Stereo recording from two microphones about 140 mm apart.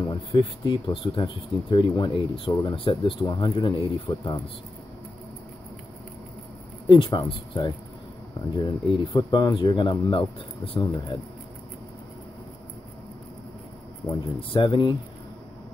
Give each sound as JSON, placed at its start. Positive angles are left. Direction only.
{"t": 0.0, "sound": "speech", "side_deg": 35}
{"t": 6.9, "sound": "speech", "side_deg": 35}
{"t": 14.5, "sound": "speech", "side_deg": 35}